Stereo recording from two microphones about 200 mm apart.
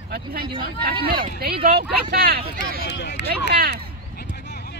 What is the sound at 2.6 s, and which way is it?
Speech, 60° left (ahead or behind).